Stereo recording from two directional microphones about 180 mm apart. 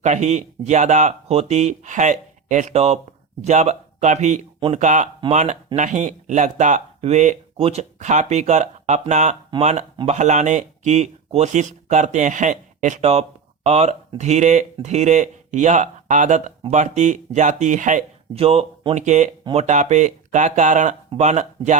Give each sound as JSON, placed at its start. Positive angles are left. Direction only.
{"t": 0.0, "sound": "speech", "side_deg": -40}